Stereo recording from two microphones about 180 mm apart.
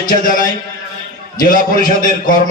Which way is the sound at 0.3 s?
50° left (ahead or behind).